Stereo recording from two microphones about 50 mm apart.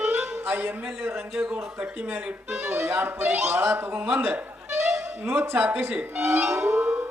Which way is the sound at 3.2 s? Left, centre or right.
Right.